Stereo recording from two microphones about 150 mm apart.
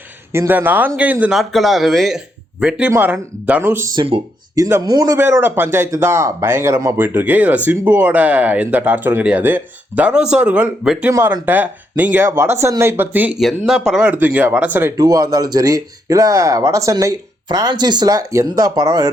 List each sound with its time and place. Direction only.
0.3 s a man's voice: 15° right (ahead or behind)
3.9 s speech: 40° right (ahead or behind)
4.5 s a man's voice: 25° right (ahead or behind)
14.9 s speech: 25° right (ahead or behind)